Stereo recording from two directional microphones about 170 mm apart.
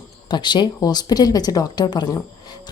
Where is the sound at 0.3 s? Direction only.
25° left (ahead or behind).